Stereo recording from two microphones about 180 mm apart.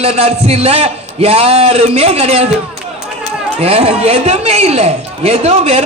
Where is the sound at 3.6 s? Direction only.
35° right (ahead or behind).